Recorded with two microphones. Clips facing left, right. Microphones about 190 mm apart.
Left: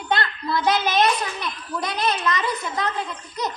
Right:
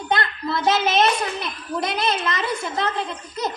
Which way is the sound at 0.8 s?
25° right (ahead or behind).